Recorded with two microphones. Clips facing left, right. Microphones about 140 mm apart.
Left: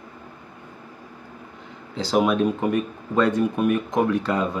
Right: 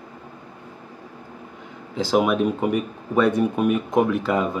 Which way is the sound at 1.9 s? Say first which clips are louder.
Right 1 dB; 10° right (ahead or behind).